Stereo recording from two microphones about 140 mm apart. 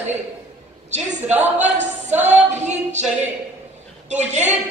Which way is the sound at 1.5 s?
55° right (ahead or behind).